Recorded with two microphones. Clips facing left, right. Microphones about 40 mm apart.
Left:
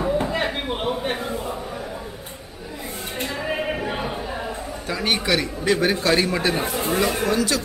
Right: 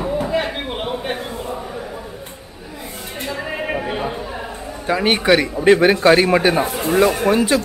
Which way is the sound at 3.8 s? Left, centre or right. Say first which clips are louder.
Right 3 dB; centre.